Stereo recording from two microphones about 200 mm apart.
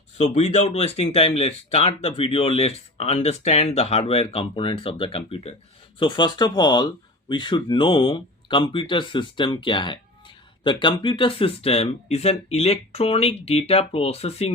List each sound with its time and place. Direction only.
0.2 s speech: 35° left (ahead or behind)